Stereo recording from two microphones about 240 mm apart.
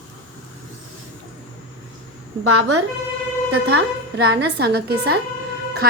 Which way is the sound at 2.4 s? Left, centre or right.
Right.